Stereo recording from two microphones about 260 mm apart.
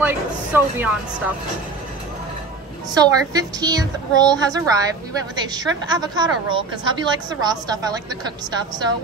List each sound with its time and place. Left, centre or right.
0.0 s speech: centre
2.9 s a woman's voice: centre